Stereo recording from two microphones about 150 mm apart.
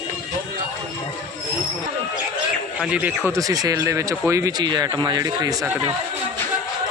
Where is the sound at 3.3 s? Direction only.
25° right (ahead or behind).